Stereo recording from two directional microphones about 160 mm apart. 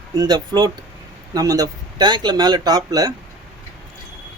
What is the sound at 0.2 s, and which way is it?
Speech, 25° right (ahead or behind).